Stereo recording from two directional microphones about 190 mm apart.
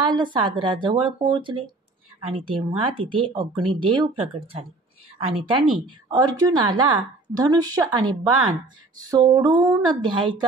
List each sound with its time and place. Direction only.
0.0 s speech: 25° right (ahead or behind)